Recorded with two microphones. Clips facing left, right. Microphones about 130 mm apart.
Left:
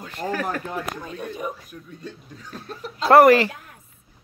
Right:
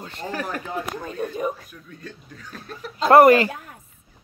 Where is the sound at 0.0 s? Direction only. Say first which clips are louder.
Left 3 dB; 30° right (ahead or behind).